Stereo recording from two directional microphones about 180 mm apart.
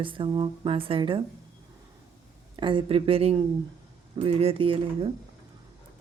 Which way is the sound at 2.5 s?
25° right (ahead or behind).